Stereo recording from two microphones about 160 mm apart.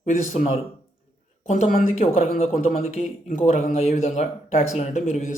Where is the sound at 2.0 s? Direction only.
40° left (ahead or behind).